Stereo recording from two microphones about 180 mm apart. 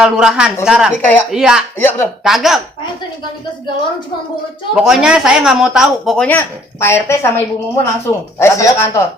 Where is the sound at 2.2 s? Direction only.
Centre (ahead or behind).